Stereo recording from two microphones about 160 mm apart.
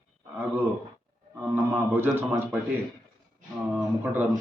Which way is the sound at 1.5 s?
15° right (ahead or behind).